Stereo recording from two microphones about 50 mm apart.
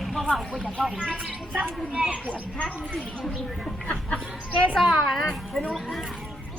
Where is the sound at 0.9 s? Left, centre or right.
Centre.